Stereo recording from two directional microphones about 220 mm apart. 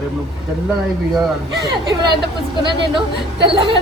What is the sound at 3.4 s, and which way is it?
Speech, 25° right (ahead or behind).